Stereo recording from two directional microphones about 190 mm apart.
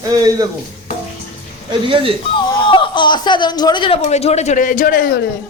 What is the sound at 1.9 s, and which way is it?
Speech, 25° right (ahead or behind).